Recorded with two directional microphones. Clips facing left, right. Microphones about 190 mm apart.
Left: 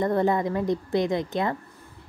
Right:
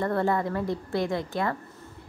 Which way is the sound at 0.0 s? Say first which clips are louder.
Left 3 dB; 20° left (ahead or behind).